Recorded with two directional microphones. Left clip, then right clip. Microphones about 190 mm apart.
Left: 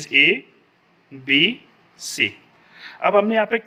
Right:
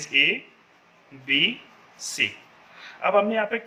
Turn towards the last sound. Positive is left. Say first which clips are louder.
# left 4 dB
turn(degrees=35)  # may be behind; listen again after turning